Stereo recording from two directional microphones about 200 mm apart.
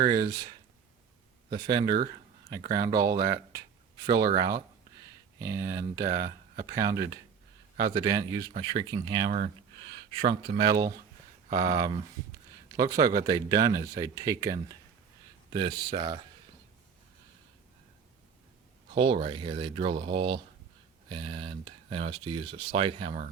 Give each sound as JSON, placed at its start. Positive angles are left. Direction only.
{"t": 0.0, "sound": "speech", "side_deg": -20}
{"t": 18.9, "sound": "speech", "side_deg": -25}